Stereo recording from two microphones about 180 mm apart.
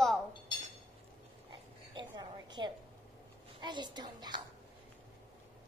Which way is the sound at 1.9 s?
25° right (ahead or behind).